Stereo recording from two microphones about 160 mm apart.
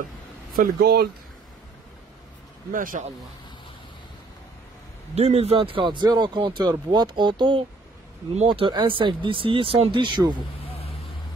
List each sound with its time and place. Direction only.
0.6 s speech: 90° right
2.7 s speech: 60° right (ahead or behind)
5.1 s speech: 40° right (ahead or behind)